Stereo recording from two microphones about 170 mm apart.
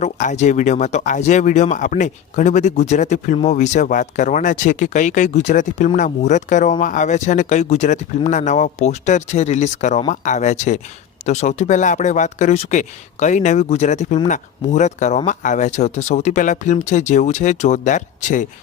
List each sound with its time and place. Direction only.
0.0 s speech: 45° left (ahead or behind)